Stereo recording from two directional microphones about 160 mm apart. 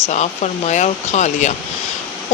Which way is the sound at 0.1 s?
45° left (ahead or behind).